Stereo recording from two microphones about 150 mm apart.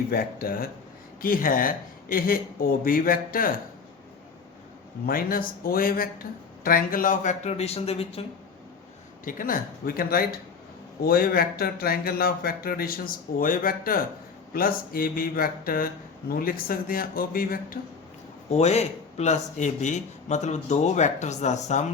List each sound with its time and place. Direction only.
0.1 s speech: 80° left
5.0 s a man's voice: 70° left (ahead or behind); by 8.2 s 40° left (ahead or behind)
9.2 s speech: 70° left (ahead or behind)
18.5 s a man's voice: 45° left (ahead or behind)